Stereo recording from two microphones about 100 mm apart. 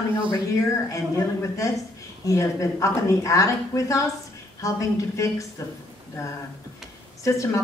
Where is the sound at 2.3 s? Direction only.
35° left (ahead or behind).